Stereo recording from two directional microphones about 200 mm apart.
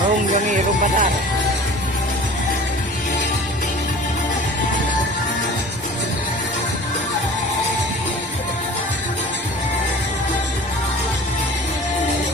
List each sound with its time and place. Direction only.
0.3 s music: 40° right (ahead or behind)